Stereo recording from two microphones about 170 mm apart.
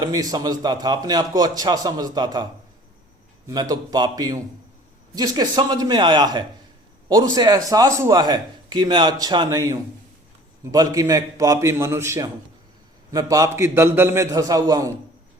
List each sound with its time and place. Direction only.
0.0 s speech: 20° right (ahead or behind)